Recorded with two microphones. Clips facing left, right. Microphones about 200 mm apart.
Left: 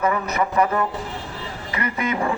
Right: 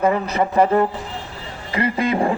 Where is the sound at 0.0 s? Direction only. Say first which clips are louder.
Right 3 dB; 30° right (ahead or behind).